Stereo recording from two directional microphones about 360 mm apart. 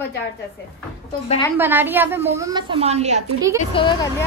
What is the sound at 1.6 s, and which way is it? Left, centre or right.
A woman's voice, centre.